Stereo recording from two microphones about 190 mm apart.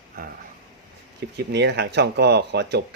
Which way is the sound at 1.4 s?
60° right (ahead or behind).